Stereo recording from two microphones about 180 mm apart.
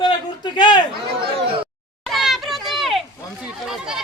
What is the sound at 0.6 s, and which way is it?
Speech, 25° left (ahead or behind).